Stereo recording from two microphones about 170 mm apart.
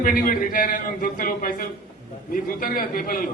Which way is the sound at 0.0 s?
55° left (ahead or behind).